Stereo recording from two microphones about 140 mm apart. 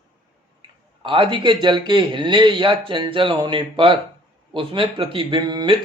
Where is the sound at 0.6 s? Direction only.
35° right (ahead or behind).